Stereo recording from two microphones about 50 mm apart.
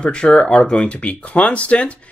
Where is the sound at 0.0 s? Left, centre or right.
Left.